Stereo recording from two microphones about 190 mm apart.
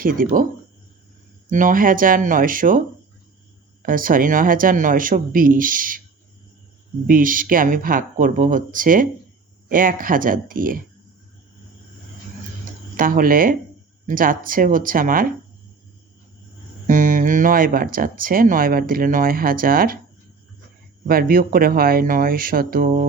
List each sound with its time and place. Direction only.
0.0 s speech: 45° right (ahead or behind)
1.5 s speech: 45° right (ahead or behind)
3.8 s speech: 45° right (ahead or behind)
7.1 s speech: 45° right (ahead or behind)
13.0 s speech: 45° right (ahead or behind)
16.8 s speech: 45° right (ahead or behind)
21.1 s speech: 50° right (ahead or behind)